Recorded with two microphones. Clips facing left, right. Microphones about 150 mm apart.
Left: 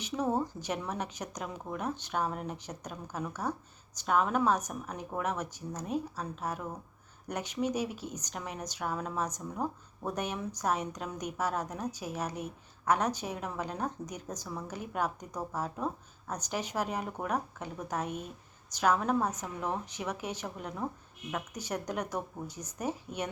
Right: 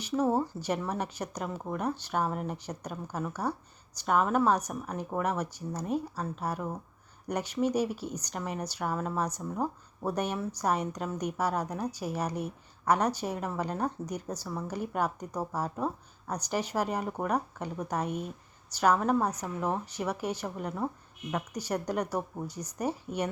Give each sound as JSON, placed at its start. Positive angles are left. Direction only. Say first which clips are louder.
{"t": 0.2, "sound": "a woman's voice", "louder": "right 3 dB", "side_deg": -10}